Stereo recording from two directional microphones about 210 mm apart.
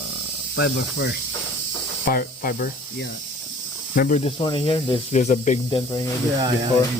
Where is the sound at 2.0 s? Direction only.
45° left (ahead or behind).